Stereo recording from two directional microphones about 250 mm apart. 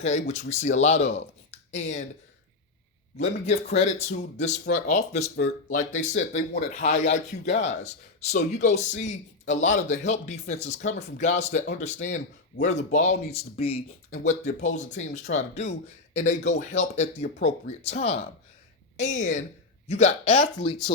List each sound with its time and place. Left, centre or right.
0.0 s speech: left
3.2 s speech: left